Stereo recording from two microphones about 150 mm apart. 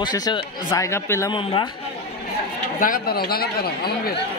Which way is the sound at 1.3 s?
30° left (ahead or behind).